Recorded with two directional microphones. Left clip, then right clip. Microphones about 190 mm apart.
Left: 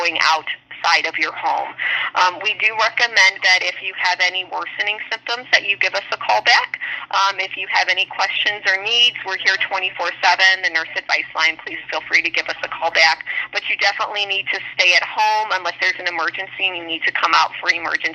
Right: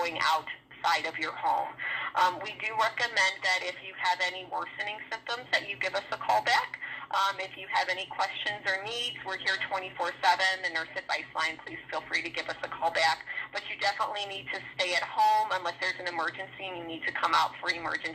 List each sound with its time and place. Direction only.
0.0 s speech: 30° left (ahead or behind)